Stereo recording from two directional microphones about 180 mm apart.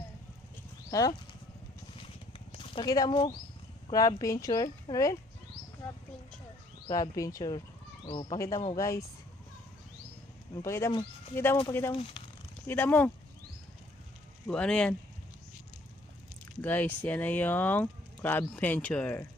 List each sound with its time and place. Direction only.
0.9 s speech: 20° left (ahead or behind)
2.0 s a sound: 30° left (ahead or behind)
3.9 s speech: 20° left (ahead or behind)
6.8 s speech: 20° left (ahead or behind)
10.5 s speech: 15° left (ahead or behind)
11.9 s speech: 30° left (ahead or behind)
12.6 s speech: 10° left (ahead or behind)
14.4 s speech: 5° left (ahead or behind)
16.6 s speech: 10° left (ahead or behind)